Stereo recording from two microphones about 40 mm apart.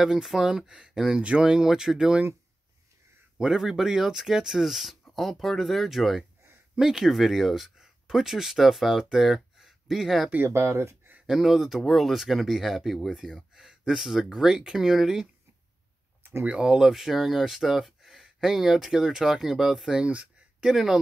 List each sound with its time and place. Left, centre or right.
0.0 s speech: centre
3.3 s speech: centre
10.4 s speech: right
11.2 s speech: centre
13.8 s speech: centre
16.2 s a sound: right
16.8 s speech: centre